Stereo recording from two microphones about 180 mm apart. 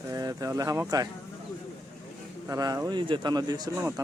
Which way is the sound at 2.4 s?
20° right (ahead or behind).